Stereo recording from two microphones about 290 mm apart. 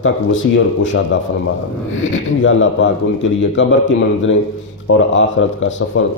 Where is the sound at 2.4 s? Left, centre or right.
Left.